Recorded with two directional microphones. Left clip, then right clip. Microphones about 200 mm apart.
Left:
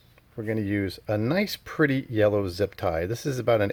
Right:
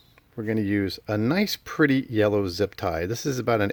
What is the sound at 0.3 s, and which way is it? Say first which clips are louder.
Speech: right 2 dB; 20° right (ahead or behind).